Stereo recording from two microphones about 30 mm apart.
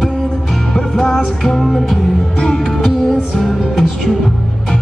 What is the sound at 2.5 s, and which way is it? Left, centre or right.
Music, centre.